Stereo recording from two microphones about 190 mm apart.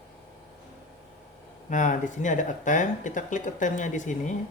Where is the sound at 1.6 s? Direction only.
40° left (ahead or behind).